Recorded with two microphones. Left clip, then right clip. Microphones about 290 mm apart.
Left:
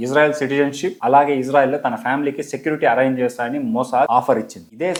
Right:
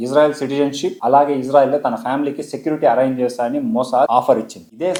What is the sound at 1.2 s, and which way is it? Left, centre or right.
Speech, left.